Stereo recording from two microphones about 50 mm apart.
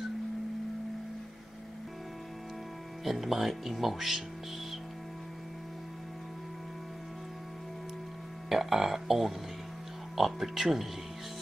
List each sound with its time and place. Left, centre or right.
3.0 s speech: centre
8.5 s speech: centre